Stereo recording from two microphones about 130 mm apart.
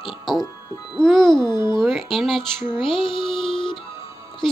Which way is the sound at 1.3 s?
35° left (ahead or behind).